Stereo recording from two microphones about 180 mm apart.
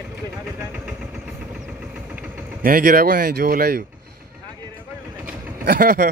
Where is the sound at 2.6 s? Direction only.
55° right (ahead or behind).